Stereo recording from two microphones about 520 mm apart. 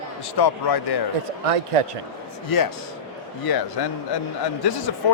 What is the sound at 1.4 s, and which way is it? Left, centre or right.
Speech, right.